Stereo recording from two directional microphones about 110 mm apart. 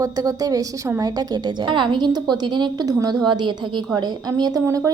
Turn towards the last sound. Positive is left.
turn(degrees=-25)  # may be behind; listen again after turning